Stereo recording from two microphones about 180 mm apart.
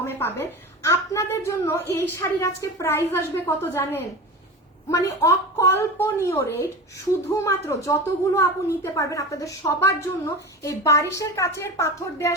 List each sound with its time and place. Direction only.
0.0 s a woman's voice: 10° left (ahead or behind)